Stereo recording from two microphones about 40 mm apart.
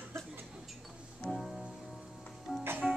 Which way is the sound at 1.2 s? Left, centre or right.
Centre.